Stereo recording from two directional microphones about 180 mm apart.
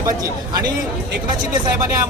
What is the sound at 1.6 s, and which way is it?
Speech, 15° right (ahead or behind).